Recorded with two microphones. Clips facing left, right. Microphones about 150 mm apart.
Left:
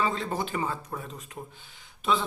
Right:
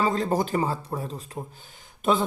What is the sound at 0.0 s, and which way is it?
Speech, 40° right (ahead or behind).